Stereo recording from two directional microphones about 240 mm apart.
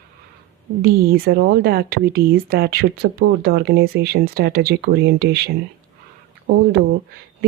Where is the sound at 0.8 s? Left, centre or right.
Right.